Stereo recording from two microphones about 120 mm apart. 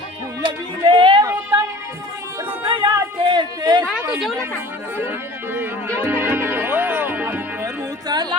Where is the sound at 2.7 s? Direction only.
45° right (ahead or behind).